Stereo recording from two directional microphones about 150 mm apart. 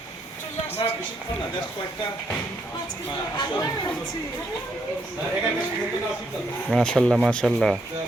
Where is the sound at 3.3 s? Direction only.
30° left (ahead or behind).